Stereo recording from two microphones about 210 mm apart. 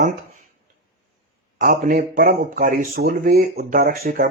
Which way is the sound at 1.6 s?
45° right (ahead or behind).